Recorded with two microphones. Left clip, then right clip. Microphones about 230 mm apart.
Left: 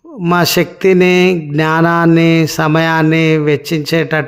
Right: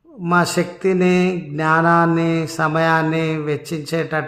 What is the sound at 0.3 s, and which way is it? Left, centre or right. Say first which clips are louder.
Mantra: left 5 dB; left.